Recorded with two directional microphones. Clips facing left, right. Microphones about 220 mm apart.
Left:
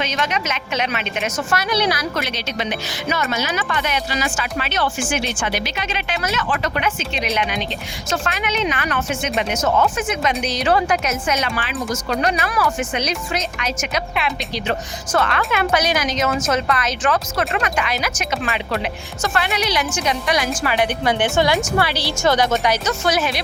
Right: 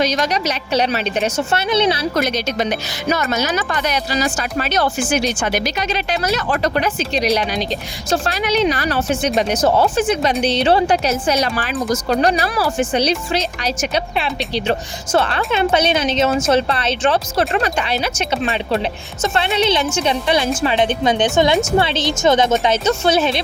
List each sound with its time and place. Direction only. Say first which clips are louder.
0.0 s a woman's voice: right 5 dB; 35° right (ahead or behind)
2.1 s a woman's voice: right 6 dB; 45° right (ahead or behind); by 23.4 s 25° right (ahead or behind)